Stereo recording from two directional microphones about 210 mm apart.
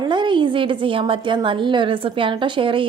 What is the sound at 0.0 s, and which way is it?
Speech, 20° right (ahead or behind).